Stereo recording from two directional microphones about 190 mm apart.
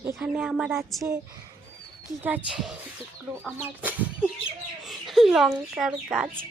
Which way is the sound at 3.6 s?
10° right (ahead or behind).